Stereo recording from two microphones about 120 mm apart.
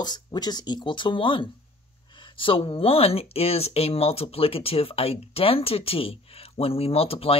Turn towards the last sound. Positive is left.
turn(degrees=55)  # may be behind; listen again after turning